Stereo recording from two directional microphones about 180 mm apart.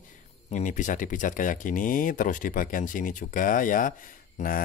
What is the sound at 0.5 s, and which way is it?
Speech, 45° left (ahead or behind).